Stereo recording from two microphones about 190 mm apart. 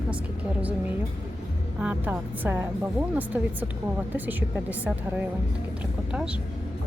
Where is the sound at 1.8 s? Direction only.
5° right (ahead or behind).